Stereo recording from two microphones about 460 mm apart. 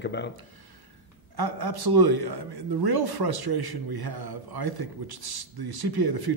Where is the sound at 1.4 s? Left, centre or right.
Right.